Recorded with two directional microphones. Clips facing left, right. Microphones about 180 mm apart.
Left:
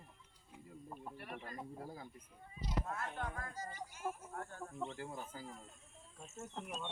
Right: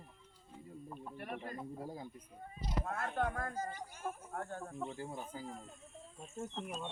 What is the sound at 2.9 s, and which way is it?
A child's voice, 55° right (ahead or behind).